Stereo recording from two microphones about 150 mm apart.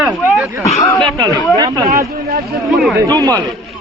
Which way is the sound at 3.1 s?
25° right (ahead or behind).